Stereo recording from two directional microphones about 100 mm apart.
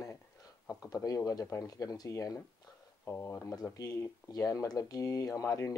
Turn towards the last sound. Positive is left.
turn(degrees=30)  # may be behind; listen again after turning